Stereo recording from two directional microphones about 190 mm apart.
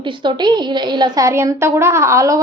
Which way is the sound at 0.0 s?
25° right (ahead or behind).